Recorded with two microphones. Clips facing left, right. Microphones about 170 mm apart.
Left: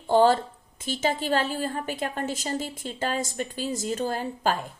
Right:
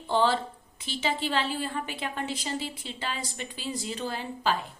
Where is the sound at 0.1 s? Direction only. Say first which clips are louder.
Left 6 dB; 45° left (ahead or behind).